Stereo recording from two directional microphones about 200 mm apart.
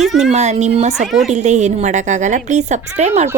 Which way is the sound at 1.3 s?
35° right (ahead or behind).